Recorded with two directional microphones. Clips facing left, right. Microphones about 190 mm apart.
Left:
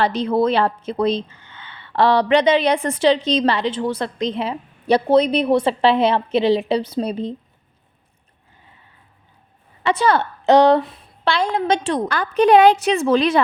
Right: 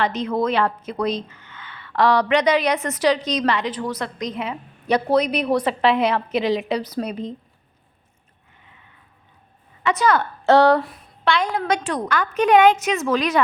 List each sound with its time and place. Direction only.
0.0 s a woman's voice: 30° left (ahead or behind)
9.8 s a woman's voice: 30° left (ahead or behind)
10.4 s a woman's voice: 20° left (ahead or behind)